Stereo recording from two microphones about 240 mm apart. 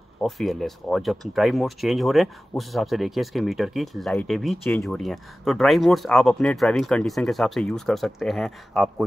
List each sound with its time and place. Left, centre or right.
0.2 s speech: centre